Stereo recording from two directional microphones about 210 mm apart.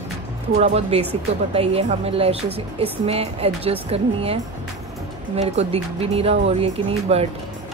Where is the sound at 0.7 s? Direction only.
30° right (ahead or behind).